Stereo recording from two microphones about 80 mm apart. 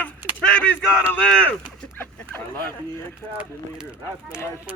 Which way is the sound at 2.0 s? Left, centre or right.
Left.